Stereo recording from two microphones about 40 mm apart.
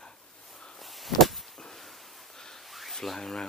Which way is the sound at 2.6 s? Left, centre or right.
Centre.